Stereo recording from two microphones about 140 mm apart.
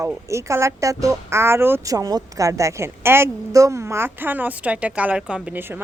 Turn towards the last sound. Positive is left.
turn(degrees=-15)  # may be behind; listen again after turning